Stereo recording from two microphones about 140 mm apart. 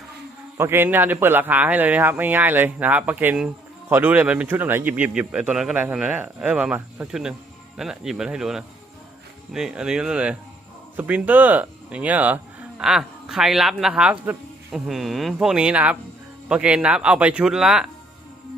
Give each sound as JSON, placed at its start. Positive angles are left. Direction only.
{"t": 0.5, "sound": "a man's voice", "side_deg": -15}